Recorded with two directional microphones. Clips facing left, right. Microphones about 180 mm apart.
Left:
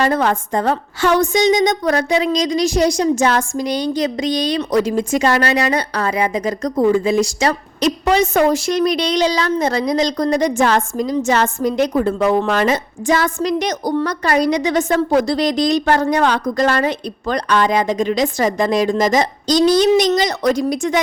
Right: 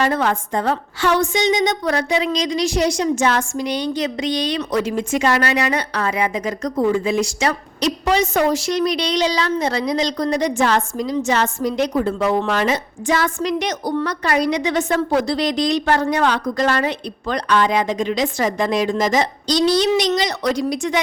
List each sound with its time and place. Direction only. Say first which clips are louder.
0.0 s a woman's voice: left 2 dB; 40° left (ahead or behind)
7.8 s a woman's voice: left 3 dB; 50° left (ahead or behind)